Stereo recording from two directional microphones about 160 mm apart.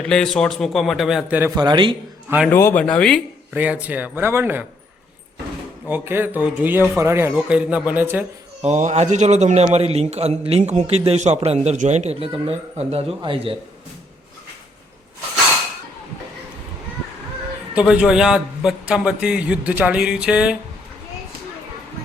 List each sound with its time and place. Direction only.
0.1 s a man's voice: 5° left (ahead or behind)
1.5 s a man's voice: 25° right (ahead or behind)
2.5 s a man's voice: 15° left (ahead or behind)
3.5 s speech: 10° right (ahead or behind)
5.9 s speech: 15° right (ahead or behind)
8.6 s a man's voice: 45° right (ahead or behind)
17.7 s a man's voice: 5° right (ahead or behind)